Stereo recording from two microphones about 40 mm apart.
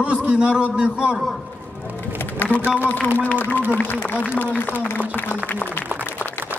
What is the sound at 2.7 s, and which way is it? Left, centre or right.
A man's voice, left.